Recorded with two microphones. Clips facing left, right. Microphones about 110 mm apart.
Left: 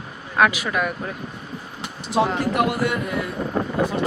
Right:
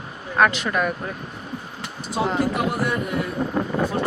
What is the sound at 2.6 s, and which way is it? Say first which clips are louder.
Speech: left 3 dB; 65° left (ahead or behind).